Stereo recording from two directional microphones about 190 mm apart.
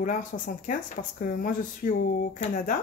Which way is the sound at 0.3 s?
50° left (ahead or behind).